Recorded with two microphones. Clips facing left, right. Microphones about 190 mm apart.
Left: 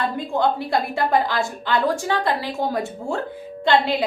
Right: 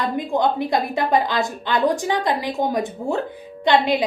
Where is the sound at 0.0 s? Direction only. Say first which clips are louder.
Right 1 dB; 15° right (ahead or behind).